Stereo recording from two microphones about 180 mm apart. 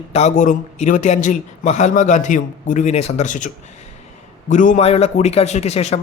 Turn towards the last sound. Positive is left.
turn(degrees=35)  # may be behind; listen again after turning